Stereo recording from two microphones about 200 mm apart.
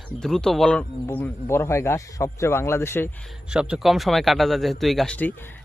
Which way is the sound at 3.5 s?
5° right (ahead or behind).